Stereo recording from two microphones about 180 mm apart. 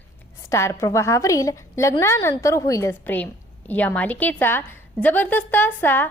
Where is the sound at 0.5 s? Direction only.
15° left (ahead or behind).